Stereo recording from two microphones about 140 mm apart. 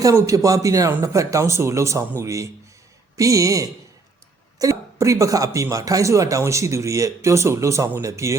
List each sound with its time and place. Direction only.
0.0 s speech: 25° right (ahead or behind)